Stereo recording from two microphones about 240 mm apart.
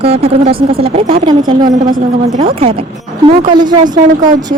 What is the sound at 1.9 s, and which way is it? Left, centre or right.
A woman's voice, right.